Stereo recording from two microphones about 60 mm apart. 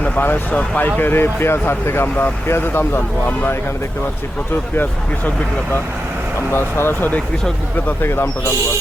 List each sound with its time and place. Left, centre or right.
0.0 s speech: left
6.5 s speech: left
8.0 s speech: left